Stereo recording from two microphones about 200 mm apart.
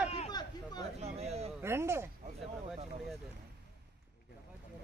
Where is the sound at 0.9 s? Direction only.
30° right (ahead or behind).